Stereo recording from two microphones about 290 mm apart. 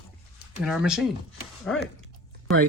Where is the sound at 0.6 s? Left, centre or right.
Centre.